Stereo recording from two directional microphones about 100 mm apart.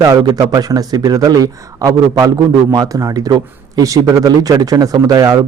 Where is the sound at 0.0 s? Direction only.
40° right (ahead or behind).